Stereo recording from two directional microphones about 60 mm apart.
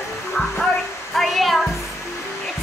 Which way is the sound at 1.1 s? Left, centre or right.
Centre.